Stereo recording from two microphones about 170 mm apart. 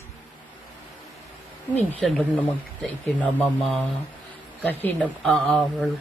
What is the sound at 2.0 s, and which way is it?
Speech, centre (ahead or behind).